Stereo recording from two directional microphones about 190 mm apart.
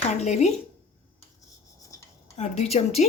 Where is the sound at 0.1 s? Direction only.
35° left (ahead or behind).